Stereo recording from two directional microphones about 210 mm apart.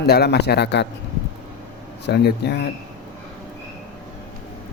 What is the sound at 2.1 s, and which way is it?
Speech, 50° left (ahead or behind).